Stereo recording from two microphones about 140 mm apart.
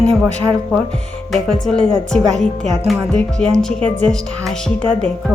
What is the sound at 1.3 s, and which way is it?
Speech, 5° left (ahead or behind).